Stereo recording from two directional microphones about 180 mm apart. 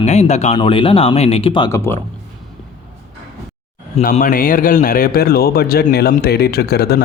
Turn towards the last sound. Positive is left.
turn(degrees=60)  # may be behind; listen again after turning